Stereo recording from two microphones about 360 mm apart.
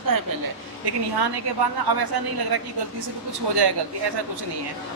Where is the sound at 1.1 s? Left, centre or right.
Right.